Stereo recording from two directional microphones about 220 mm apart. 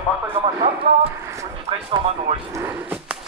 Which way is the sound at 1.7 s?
30° right (ahead or behind).